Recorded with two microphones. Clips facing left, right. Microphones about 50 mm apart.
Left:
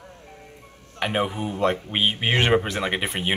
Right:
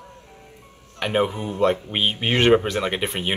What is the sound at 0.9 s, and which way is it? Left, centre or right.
Speech, centre.